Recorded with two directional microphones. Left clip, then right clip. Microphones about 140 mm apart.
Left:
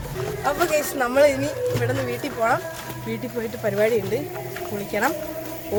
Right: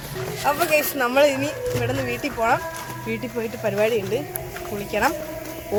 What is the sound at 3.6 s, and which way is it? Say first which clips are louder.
Speech: left 1 dB; 5° right (ahead or behind).